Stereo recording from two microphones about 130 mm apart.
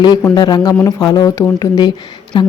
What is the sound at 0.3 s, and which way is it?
Speech, 30° left (ahead or behind).